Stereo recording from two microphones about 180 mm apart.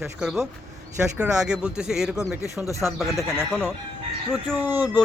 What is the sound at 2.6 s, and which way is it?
Speech, 20° left (ahead or behind).